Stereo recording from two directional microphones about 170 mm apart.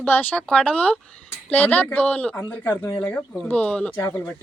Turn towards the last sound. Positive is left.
turn(degrees=15)  # may be behind; listen again after turning